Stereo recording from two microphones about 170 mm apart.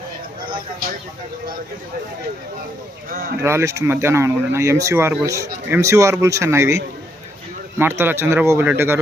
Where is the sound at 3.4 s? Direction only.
15° right (ahead or behind).